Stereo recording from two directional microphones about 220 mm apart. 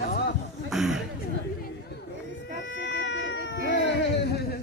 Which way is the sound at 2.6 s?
55° left (ahead or behind).